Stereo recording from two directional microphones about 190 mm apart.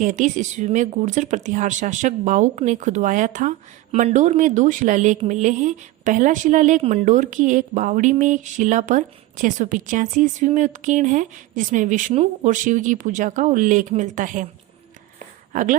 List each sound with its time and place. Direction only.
0.0 s a woman's voice: 40° right (ahead or behind)
15.5 s speech: 45° right (ahead or behind)